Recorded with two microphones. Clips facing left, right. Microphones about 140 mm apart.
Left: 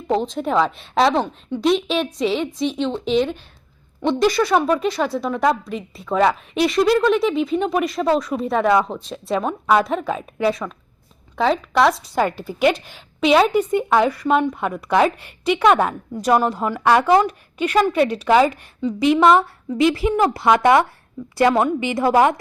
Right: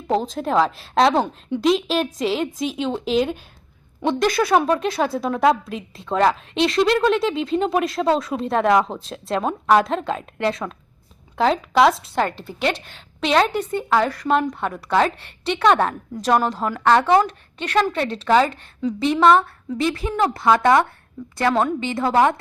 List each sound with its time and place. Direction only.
0.1 s a woman's voice: centre (ahead or behind)
8.0 s speech: 10° right (ahead or behind)
8.4 s a woman's voice: centre (ahead or behind); by 20.8 s 15° left (ahead or behind)
21.2 s a woman's voice: centre (ahead or behind)
21.5 s a woman's voice: 10° left (ahead or behind)